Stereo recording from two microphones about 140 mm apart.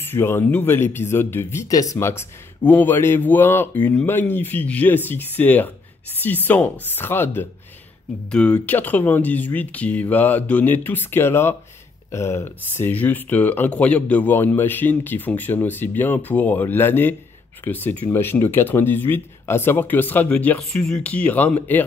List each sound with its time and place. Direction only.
0.0 s speech: 15° left (ahead or behind)